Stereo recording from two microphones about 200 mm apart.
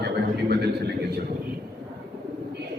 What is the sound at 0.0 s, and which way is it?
A man's voice, 55° right (ahead or behind).